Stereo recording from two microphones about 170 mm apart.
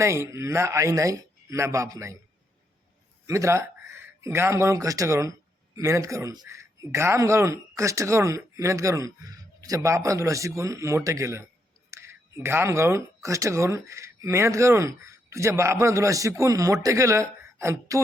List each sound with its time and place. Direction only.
0.0 s speech: 15° right (ahead or behind)
3.2 s speech: 15° right (ahead or behind)